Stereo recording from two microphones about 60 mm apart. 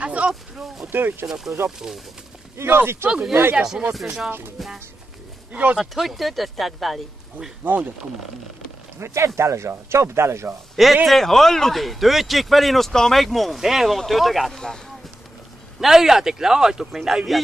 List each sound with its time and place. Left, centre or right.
0.0 s speech: right
0.3 s speech: centre
0.8 s speech: right
1.2 s speech: centre
2.5 s speech: right
3.5 s speech: centre
4.6 s music: centre
5.5 s speech: right
5.8 s speech: centre
7.6 s speech: right
9.0 s speech: right
11.1 s speech: centre
15.8 s speech: centre